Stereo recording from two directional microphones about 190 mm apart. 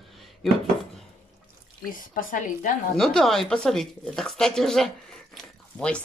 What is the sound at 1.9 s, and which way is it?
Speech, 45° left (ahead or behind).